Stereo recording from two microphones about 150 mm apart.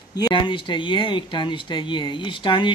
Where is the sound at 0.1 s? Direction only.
30° left (ahead or behind).